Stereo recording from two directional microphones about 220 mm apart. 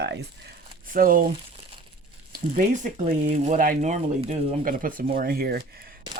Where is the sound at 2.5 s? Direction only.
35° right (ahead or behind).